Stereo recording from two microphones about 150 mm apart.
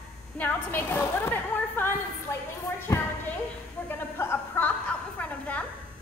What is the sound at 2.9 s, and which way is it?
Speech, 20° left (ahead or behind).